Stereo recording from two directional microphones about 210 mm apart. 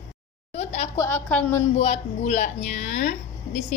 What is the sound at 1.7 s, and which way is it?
A woman's voice, 30° left (ahead or behind).